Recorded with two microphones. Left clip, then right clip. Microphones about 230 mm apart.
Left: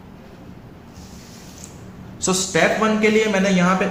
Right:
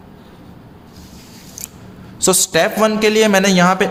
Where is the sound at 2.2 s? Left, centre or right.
Right.